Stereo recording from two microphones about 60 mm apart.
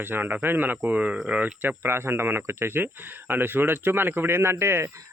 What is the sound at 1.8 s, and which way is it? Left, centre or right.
Speech, right.